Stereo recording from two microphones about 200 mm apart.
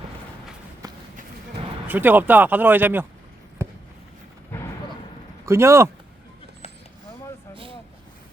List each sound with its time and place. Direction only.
0.8 s run: 20° right (ahead or behind)
1.9 s speech: 10° right (ahead or behind)
4.5 s artillery fire: 10° left (ahead or behind)
5.5 s speech: 15° right (ahead or behind)
7.5 s vehicle: 25° right (ahead or behind)